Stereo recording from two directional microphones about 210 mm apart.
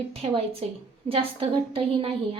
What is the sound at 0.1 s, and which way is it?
A woman's voice, 30° right (ahead or behind).